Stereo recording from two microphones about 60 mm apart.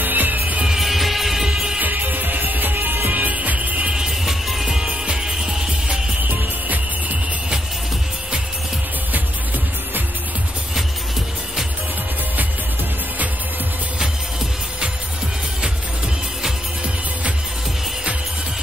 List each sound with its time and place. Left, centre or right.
0.0 s music: right
0.7 s music: centre
1.8 s music: right
3.8 s music: centre